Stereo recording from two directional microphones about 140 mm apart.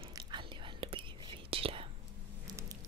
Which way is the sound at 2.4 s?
25° right (ahead or behind).